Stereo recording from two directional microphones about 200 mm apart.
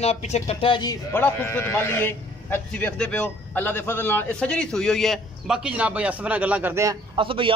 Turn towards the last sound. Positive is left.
turn(degrees=-25)  # may be behind; listen again after turning